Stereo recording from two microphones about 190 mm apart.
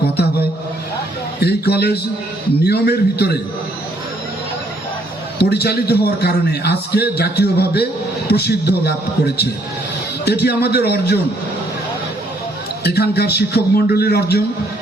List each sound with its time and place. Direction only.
1.4 s a man's voice: 60° left (ahead or behind)
5.4 s a man's voice: 60° left (ahead or behind)
12.8 s a man's voice: 60° left (ahead or behind)